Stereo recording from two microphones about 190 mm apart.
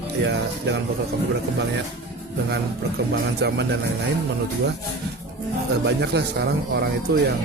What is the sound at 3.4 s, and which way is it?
Speech, 60° right (ahead or behind).